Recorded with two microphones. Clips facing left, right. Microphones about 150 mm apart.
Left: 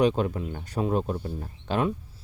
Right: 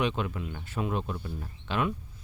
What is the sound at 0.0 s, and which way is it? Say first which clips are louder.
Speech: left 7 dB; 40° left (ahead or behind).